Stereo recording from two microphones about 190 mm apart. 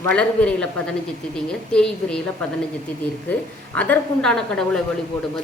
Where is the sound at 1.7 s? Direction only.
5° left (ahead or behind).